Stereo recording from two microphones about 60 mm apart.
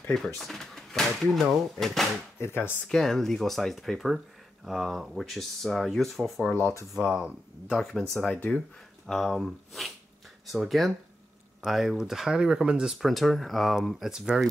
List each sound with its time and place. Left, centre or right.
0.1 s speech: centre
2.4 s speech: left
2.9 s speech: centre
6.6 s speech: right
7.0 s speech: centre
7.7 s speech: centre
9.0 s speech: centre
13.0 s speech: centre